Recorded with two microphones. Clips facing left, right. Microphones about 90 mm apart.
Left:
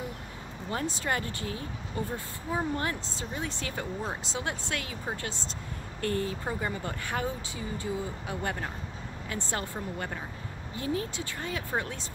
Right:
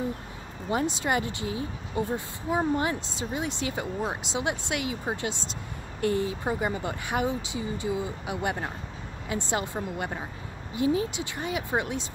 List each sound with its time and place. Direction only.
0.7 s speech: 15° right (ahead or behind)